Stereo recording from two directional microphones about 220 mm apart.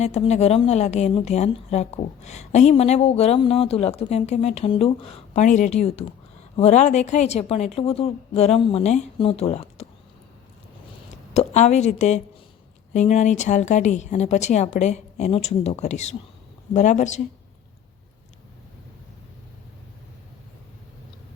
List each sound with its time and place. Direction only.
0.0 s a woman's voice: 30° left (ahead or behind)
11.3 s speech: 30° left (ahead or behind)